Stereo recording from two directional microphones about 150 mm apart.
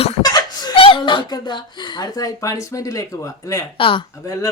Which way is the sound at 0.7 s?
35° left (ahead or behind).